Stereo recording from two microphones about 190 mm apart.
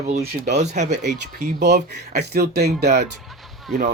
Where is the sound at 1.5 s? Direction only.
60° right (ahead or behind).